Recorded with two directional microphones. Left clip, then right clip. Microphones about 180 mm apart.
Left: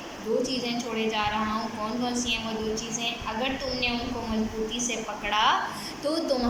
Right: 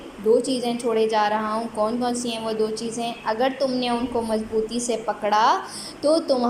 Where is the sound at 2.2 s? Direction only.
40° right (ahead or behind).